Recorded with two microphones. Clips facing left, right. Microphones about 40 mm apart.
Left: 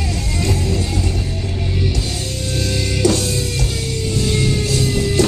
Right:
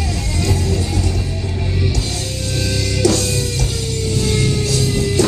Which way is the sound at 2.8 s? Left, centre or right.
Left.